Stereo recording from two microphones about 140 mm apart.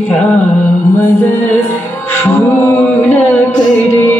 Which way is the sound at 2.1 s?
15° left (ahead or behind).